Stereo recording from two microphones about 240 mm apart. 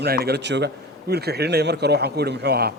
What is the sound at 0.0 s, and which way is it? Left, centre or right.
Speech, right.